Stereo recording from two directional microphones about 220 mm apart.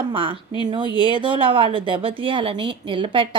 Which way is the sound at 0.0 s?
25° right (ahead or behind).